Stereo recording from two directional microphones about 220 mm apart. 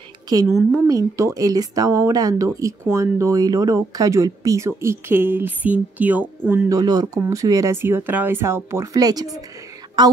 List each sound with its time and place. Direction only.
0.5 s a woman's voice: centre (ahead or behind)
0.8 s speech: 15° right (ahead or behind)
10.0 s a sound: 20° right (ahead or behind)